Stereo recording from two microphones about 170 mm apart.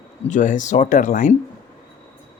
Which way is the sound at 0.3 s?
50° left (ahead or behind).